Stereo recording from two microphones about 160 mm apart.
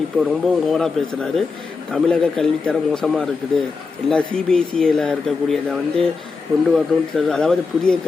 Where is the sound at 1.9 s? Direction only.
5° left (ahead or behind).